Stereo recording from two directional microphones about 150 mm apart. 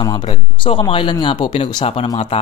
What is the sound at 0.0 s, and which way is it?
Speech, 30° left (ahead or behind).